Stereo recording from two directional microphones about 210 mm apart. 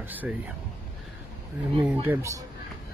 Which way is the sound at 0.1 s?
10° right (ahead or behind).